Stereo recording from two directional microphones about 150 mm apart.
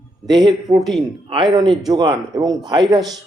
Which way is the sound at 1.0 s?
35° right (ahead or behind).